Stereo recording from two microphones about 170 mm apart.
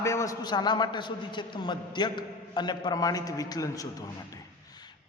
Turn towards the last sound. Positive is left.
turn(degrees=25)  # may be behind; listen again after turning